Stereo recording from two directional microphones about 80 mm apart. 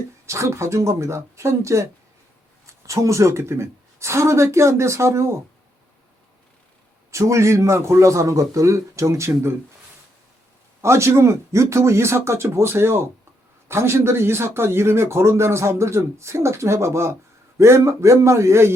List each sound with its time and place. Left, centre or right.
0.3 s speech: right
7.1 s speech: right
10.8 s speech: right